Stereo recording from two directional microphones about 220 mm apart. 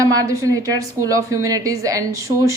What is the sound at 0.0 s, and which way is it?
Speech, 15° right (ahead or behind).